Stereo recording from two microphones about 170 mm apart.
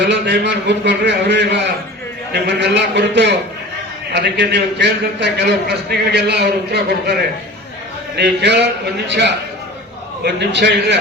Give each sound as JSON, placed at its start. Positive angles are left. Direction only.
{"t": 0.0, "sound": "a man's voice", "side_deg": -90}